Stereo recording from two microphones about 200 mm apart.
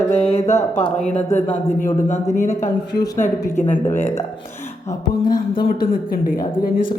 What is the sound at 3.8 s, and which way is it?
Speech, 10° left (ahead or behind).